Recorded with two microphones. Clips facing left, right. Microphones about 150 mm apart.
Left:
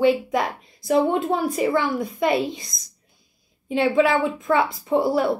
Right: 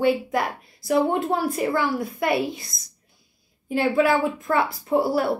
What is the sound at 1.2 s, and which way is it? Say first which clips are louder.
Speech: left 2 dB; centre (ahead or behind).